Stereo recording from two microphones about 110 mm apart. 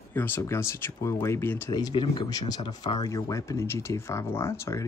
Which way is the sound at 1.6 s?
35° left (ahead or behind).